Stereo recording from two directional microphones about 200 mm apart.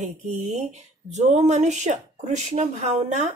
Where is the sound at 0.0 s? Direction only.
35° right (ahead or behind).